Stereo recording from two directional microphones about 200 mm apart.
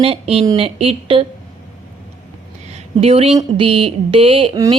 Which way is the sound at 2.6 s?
30° right (ahead or behind).